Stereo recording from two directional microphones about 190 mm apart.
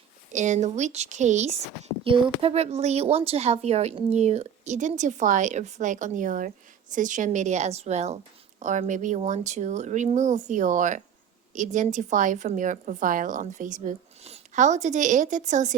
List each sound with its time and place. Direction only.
0.3 s speech: 40° right (ahead or behind)